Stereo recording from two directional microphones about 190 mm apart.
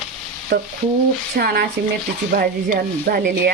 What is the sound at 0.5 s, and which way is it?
Speech, 50° right (ahead or behind).